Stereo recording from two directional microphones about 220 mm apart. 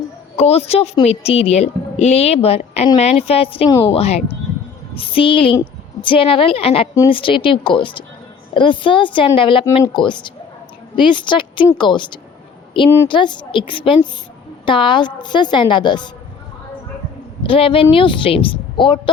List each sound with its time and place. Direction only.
0.3 s a woman's voice: 30° left (ahead or behind)
17.4 s a woman's voice: 25° left (ahead or behind)